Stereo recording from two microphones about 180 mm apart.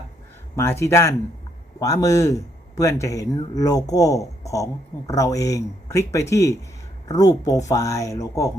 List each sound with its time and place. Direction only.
0.5 s speech: 15° left (ahead or behind)